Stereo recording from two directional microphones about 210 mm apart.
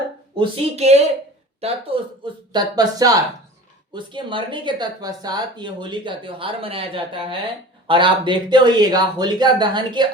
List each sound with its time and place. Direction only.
0.3 s speech: 30° right (ahead or behind)